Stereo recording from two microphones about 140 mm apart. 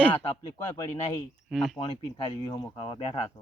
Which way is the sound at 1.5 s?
Centre (ahead or behind).